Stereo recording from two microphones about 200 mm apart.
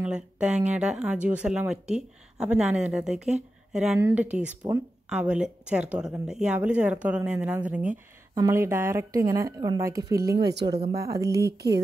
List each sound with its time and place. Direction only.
0.0 s speech: 5° right (ahead or behind)
10.5 s speech: 55° right (ahead or behind)
11.0 s speech: 15° right (ahead or behind)
11.2 s a sound: 55° right (ahead or behind)